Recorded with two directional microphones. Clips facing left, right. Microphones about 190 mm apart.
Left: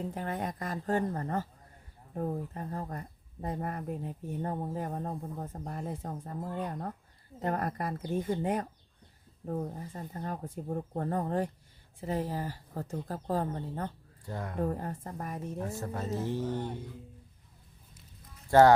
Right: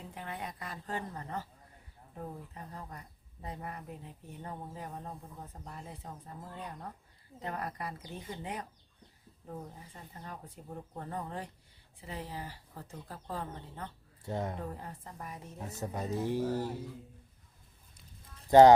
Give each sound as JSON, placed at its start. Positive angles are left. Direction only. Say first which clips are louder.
{"t": 0.0, "sound": "speech", "louder": "left 8 dB", "side_deg": 45}
{"t": 14.3, "sound": "speech", "louder": "right 3 dB", "side_deg": -20}
{"t": 14.6, "sound": "speech", "louder": "left 9 dB", "side_deg": 50}
{"t": 15.8, "sound": "speech", "louder": "right 3 dB", "side_deg": -15}
{"t": 18.5, "sound": "speech", "louder": "right 2 dB", "side_deg": -20}